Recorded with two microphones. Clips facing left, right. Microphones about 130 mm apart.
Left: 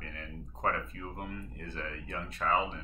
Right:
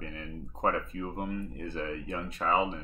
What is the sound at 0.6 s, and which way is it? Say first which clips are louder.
Speech: right 4 dB; 20° right (ahead or behind).